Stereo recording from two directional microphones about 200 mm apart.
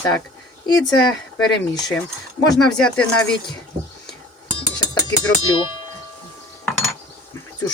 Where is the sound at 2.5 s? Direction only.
5° left (ahead or behind).